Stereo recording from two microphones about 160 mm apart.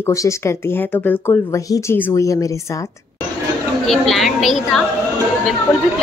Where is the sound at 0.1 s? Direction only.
20° left (ahead or behind).